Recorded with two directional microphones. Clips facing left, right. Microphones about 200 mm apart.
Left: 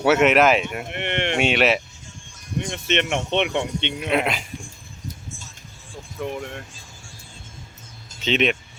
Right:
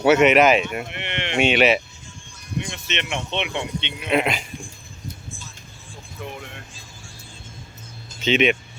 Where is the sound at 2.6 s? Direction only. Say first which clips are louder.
Left 5 dB; 50° left (ahead or behind).